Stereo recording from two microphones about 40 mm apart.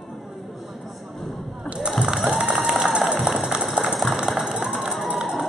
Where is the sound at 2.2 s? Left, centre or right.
Right.